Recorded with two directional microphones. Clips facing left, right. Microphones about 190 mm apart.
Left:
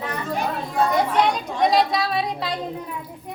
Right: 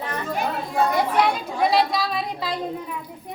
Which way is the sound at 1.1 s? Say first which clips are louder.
Left 1 dB; 5° right (ahead or behind).